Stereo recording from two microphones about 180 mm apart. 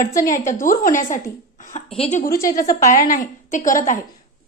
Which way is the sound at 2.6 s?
45° left (ahead or behind).